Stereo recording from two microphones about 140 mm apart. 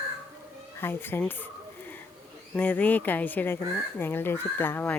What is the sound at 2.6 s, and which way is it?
Speech, 10° left (ahead or behind).